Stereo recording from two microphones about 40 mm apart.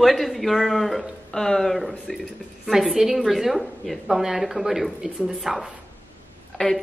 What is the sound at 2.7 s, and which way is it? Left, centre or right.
A woman's voice, centre.